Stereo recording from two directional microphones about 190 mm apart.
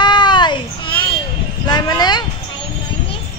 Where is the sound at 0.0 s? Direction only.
25° left (ahead or behind).